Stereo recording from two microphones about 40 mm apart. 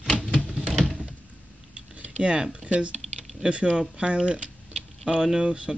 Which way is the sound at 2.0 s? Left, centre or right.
Right.